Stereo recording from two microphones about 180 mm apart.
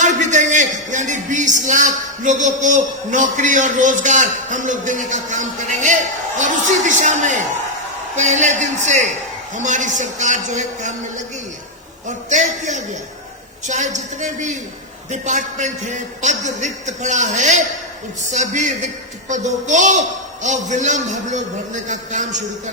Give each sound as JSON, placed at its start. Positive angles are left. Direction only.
{"t": 0.0, "sound": "a man's voice", "side_deg": -40}
{"t": 12.0, "sound": "a man's voice", "side_deg": -40}